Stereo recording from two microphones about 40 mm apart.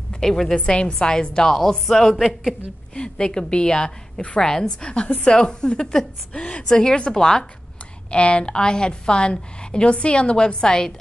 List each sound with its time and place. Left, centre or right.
0.2 s a woman's voice: centre
0.6 s a woman's voice: left
1.9 s a man's voice: centre
2.9 s a woman's voice: left
4.8 s a woman's voice: left
8.1 s a woman's voice: left